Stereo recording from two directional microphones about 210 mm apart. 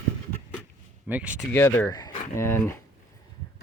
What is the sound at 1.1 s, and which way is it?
Speech, 5° right (ahead or behind).